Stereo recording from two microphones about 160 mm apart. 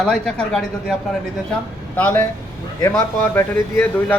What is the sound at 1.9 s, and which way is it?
A man's voice, 10° left (ahead or behind).